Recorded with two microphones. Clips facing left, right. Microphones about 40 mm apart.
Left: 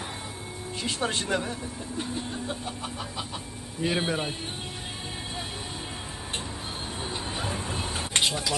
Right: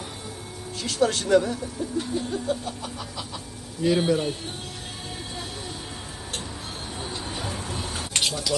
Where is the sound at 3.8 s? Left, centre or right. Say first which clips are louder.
Right 6 dB; centre.